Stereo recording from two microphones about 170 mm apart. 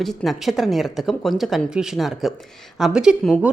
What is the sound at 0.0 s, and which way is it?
A woman's voice, centre (ahead or behind).